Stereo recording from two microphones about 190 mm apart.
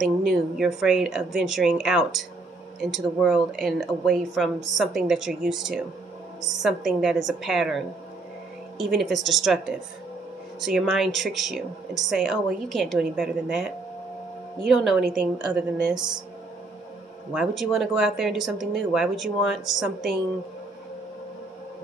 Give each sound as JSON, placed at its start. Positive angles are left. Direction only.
{"t": 0.0, "sound": "a woman's voice", "side_deg": 0}
{"t": 15.9, "sound": "speech", "side_deg": -20}
{"t": 17.3, "sound": "speech", "side_deg": 0}